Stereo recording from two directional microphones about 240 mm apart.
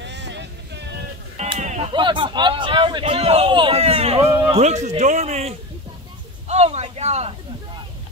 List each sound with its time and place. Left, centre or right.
0.0 s vehicle: right
1.3 s speech: right
4.2 s speech: centre
4.5 s a man's voice: right